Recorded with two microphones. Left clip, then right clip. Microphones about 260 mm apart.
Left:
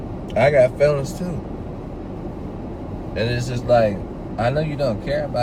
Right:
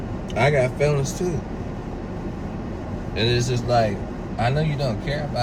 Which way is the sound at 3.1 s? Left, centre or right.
Left.